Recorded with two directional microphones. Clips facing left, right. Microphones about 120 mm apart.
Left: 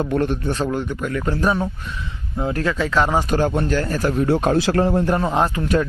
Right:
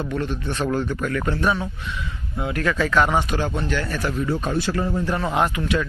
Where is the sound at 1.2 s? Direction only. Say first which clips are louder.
Left 5 dB; 30° left (ahead or behind).